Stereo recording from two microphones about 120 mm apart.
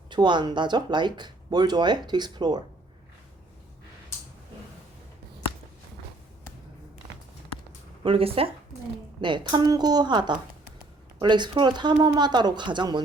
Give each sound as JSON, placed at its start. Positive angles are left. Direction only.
{"t": 0.1, "sound": "speech", "side_deg": -40}
{"t": 8.0, "sound": "speech", "side_deg": -50}
{"t": 9.2, "sound": "speech", "side_deg": -40}